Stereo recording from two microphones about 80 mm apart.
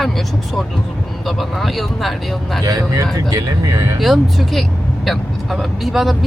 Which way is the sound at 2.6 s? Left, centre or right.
Right.